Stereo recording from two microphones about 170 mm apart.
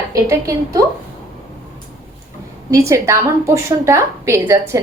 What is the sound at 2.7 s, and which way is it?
A woman's voice, 15° right (ahead or behind).